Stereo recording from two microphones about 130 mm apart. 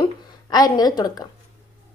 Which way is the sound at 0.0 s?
30° left (ahead or behind).